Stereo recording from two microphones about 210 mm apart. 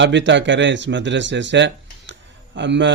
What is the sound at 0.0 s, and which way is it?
A man's voice, 60° right (ahead or behind).